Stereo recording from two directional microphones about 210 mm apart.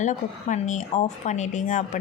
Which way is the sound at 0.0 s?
35° left (ahead or behind).